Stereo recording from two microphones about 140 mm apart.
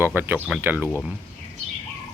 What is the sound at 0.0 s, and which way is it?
Speech, 15° right (ahead or behind).